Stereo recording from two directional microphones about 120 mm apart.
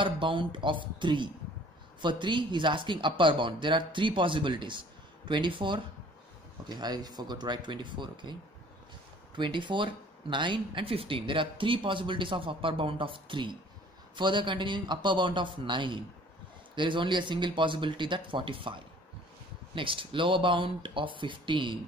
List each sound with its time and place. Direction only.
0.0 s a man's voice: 45° right (ahead or behind)